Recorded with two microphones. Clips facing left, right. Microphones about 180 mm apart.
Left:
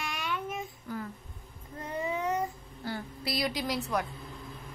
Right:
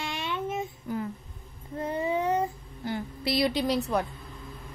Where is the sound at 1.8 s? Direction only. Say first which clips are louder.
Right 5 dB; 30° right (ahead or behind).